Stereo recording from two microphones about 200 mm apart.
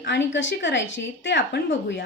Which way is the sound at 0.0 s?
60° left (ahead or behind).